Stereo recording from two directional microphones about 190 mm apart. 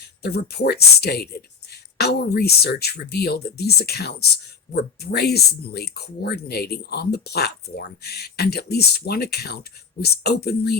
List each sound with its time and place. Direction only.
0.2 s speech: 60° left (ahead or behind)